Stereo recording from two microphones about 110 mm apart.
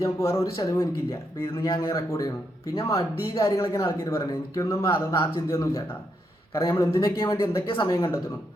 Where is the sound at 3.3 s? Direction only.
25° left (ahead or behind).